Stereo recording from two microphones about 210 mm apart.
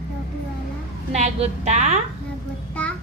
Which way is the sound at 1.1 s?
30° right (ahead or behind).